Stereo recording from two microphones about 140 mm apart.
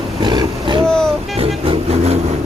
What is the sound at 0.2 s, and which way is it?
Vehicle, 35° right (ahead or behind).